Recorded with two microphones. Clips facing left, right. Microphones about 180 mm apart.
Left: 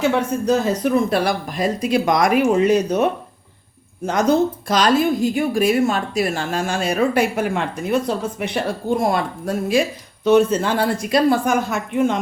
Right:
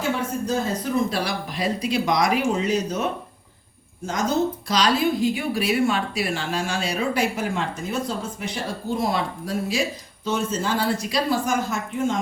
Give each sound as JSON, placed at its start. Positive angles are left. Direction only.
{"t": 0.4, "sound": "a woman's voice", "side_deg": 70}
{"t": 10.2, "sound": "a woman's voice", "side_deg": 65}